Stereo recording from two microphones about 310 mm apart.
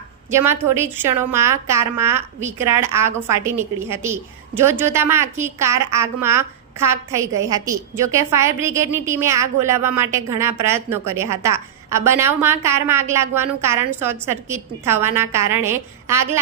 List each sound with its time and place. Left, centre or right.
0.3 s a woman's voice: centre